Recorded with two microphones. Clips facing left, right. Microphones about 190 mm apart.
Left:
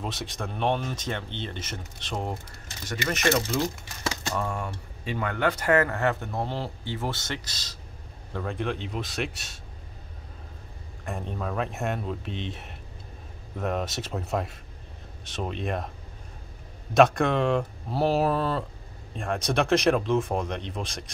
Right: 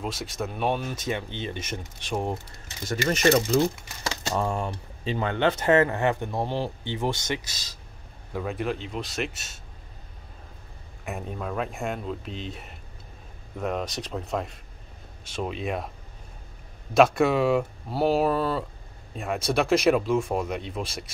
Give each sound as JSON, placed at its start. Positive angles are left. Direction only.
{"t": 0.0, "sound": "speech", "side_deg": 0}
{"t": 3.1, "sound": "speech", "side_deg": -35}
{"t": 11.1, "sound": "speech", "side_deg": -5}
{"t": 16.9, "sound": "speech", "side_deg": -5}